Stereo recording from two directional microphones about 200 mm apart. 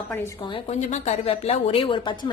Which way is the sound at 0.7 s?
35° left (ahead or behind).